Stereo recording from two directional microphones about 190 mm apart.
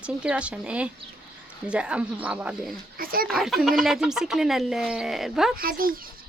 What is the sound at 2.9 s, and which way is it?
Speech, 50° right (ahead or behind).